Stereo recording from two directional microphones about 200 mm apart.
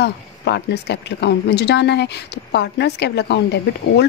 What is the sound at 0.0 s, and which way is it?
A woman's voice, 55° left (ahead or behind).